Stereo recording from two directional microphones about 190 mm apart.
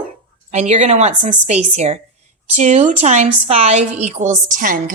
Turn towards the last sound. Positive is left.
turn(degrees=-45)  # may be behind; listen again after turning